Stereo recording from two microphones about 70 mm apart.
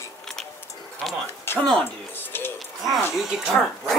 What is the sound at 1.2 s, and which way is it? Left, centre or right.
Speech, left.